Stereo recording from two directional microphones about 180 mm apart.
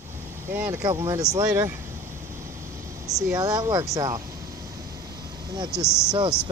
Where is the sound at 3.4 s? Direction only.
20° right (ahead or behind).